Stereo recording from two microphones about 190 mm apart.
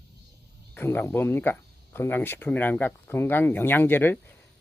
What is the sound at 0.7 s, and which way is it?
Speech, 10° left (ahead or behind).